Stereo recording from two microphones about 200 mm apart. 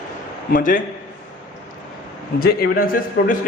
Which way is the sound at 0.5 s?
45° left (ahead or behind).